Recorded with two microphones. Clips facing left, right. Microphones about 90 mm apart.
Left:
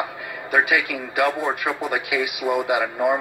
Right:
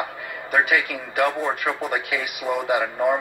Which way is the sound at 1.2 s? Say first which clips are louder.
Even; 10° left (ahead or behind).